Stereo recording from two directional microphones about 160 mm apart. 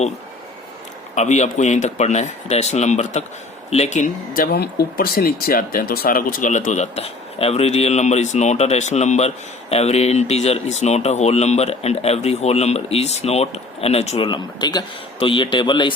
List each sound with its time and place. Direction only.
1.1 s speech: 45° left (ahead or behind)
4.5 s speech: 80° left; by 14.3 s 40° left (ahead or behind)
14.3 s speech: 30° left (ahead or behind)